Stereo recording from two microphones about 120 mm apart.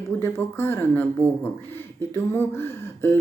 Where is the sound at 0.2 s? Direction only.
20° left (ahead or behind).